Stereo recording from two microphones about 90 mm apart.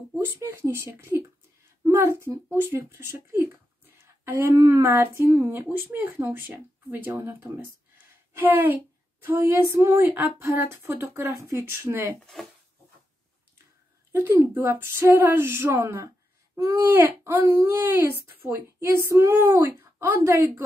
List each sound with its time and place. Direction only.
0.2 s speech: 25° right (ahead or behind)
8.4 s speech: 20° right (ahead or behind)
14.1 s speech: 25° right (ahead or behind)